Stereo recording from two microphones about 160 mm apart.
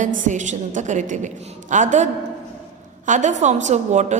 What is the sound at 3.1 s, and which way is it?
A woman's voice, 50° right (ahead or behind).